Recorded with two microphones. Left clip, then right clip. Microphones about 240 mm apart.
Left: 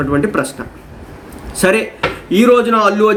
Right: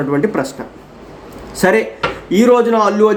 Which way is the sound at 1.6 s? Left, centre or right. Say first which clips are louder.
Even; centre.